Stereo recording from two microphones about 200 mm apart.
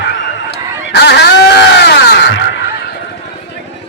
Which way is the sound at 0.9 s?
60° left (ahead or behind).